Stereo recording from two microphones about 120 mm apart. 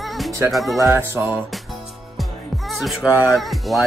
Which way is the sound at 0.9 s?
20° right (ahead or behind).